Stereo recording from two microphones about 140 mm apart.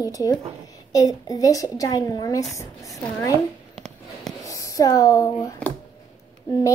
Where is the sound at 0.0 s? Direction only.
25° left (ahead or behind).